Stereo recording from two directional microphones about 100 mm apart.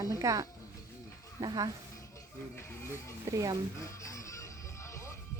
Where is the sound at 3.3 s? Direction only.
35° right (ahead or behind).